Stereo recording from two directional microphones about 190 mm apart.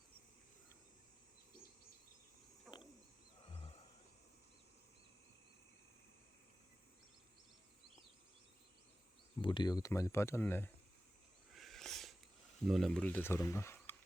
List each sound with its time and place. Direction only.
2.7 s wild animals: centre (ahead or behind)
9.4 s speech: 25° left (ahead or behind)
11.5 s a sound: centre (ahead or behind)
12.6 s speech: centre (ahead or behind)